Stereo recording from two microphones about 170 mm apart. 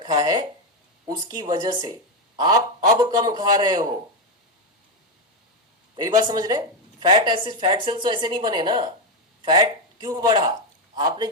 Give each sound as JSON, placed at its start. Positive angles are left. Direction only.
{"t": 0.0, "sound": "a sound", "side_deg": -25}
{"t": 1.0, "sound": "speech", "side_deg": -25}
{"t": 6.0, "sound": "speech", "side_deg": -25}